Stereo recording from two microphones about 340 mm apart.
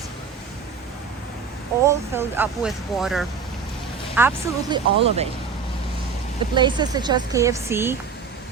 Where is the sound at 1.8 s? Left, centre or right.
Centre.